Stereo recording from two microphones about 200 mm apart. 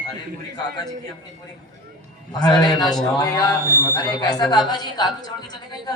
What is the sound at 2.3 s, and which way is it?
A man's voice, 20° left (ahead or behind).